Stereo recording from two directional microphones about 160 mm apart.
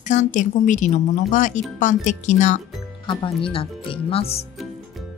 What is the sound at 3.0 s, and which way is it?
Speech, 30° left (ahead or behind).